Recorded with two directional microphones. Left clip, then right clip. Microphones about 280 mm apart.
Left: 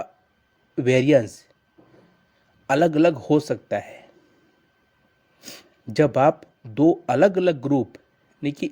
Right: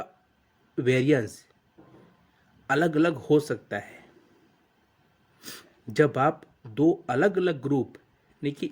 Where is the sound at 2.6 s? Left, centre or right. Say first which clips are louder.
Left 6 dB; centre.